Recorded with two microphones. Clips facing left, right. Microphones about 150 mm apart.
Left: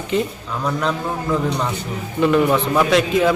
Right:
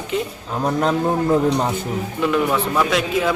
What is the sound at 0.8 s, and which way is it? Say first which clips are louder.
Music: right 4 dB; 40° right (ahead or behind).